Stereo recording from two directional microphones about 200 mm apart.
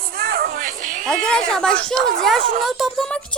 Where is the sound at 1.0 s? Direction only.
5° left (ahead or behind).